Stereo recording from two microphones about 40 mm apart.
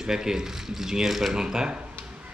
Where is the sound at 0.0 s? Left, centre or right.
Centre.